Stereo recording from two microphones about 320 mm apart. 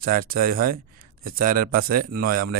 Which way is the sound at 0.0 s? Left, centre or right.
Right.